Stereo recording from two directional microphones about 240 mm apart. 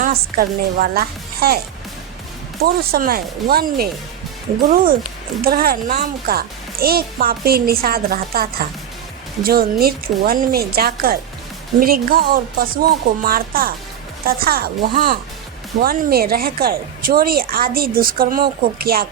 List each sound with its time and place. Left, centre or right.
0.0 s a woman's voice: right
2.6 s a woman's voice: right